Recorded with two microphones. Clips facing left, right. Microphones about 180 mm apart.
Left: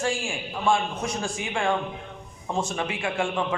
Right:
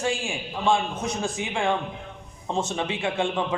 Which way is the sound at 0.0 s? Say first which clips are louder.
Even; 20° right (ahead or behind).